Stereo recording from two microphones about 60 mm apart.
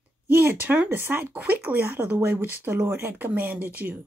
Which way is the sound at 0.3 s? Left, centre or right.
Right.